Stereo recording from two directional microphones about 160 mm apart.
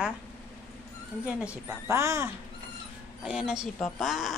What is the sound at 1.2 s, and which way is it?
A woman's voice, 5° right (ahead or behind).